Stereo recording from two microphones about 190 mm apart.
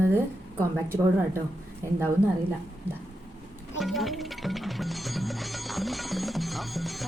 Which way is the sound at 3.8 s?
Centre (ahead or behind).